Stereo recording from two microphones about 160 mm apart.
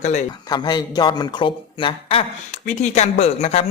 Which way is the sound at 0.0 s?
50° left (ahead or behind).